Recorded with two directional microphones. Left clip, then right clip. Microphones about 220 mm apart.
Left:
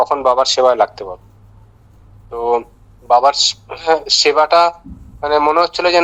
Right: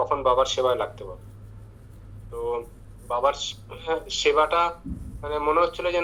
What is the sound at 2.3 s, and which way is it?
A man's voice, 50° left (ahead or behind).